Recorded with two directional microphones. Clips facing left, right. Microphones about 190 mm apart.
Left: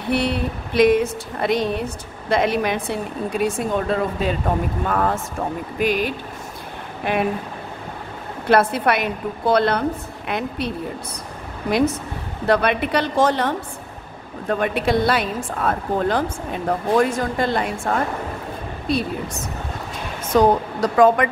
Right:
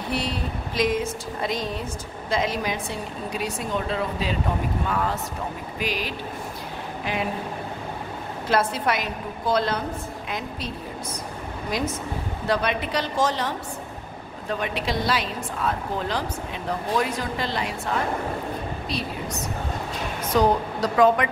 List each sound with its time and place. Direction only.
0.1 s a woman's voice: 60° left (ahead or behind)
8.5 s speech: 60° left (ahead or behind)
11.7 s a woman's voice: 65° left (ahead or behind)
20.3 s a woman's voice: 50° left (ahead or behind)